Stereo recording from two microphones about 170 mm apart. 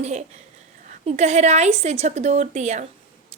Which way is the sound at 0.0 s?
40° right (ahead or behind).